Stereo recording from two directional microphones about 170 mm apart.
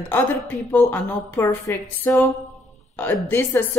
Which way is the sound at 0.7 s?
15° left (ahead or behind).